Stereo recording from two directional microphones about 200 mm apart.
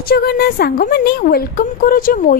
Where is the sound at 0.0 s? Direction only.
50° left (ahead or behind).